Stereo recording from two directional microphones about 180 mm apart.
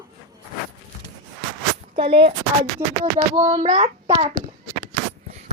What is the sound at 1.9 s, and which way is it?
Speech, 30° right (ahead or behind).